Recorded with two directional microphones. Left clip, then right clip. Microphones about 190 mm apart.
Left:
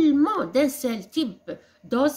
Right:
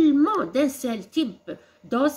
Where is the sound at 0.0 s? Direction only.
15° left (ahead or behind).